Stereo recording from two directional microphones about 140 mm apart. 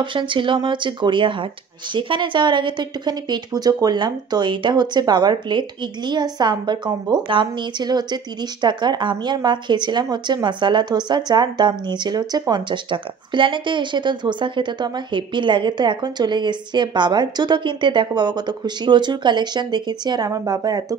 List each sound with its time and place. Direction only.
0.0 s speech: 35° right (ahead or behind)